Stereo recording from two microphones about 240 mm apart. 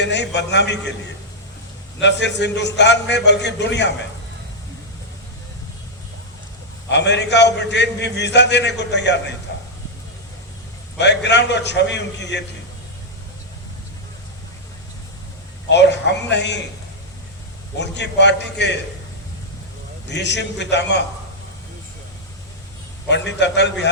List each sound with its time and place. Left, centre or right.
0.0 s a man's voice: left
2.0 s a man's voice: left
6.9 s a man's voice: left
10.9 s a man's voice: left
15.7 s a man's voice: left
17.7 s a man's voice: left
20.1 s a man's voice: left
23.0 s a man's voice: left